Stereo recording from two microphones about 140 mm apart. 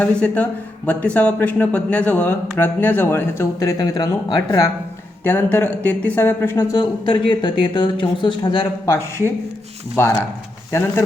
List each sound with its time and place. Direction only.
0.0 s speech: 10° left (ahead or behind); by 4.6 s 30° left (ahead or behind)
5.2 s speech: 15° left (ahead or behind)
6.7 s speech: 35° left (ahead or behind)
8.9 s speech: 20° left (ahead or behind)